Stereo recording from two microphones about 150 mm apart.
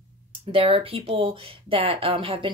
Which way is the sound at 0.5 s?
40° right (ahead or behind).